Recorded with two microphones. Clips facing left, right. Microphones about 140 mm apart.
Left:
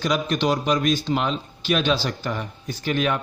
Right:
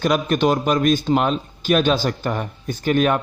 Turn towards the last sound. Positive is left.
turn(degrees=-45)  # may be behind; listen again after turning